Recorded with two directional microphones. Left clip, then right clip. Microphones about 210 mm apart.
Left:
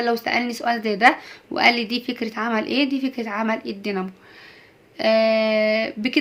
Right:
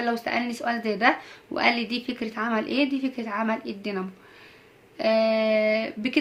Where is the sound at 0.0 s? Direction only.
25° left (ahead or behind).